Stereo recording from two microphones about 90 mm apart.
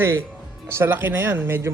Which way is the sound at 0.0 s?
25° right (ahead or behind).